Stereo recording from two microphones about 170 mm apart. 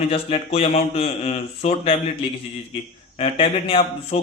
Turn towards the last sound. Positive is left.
turn(degrees=35)  # may be behind; listen again after turning